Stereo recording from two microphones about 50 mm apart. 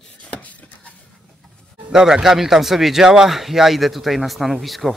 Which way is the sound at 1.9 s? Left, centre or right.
Centre.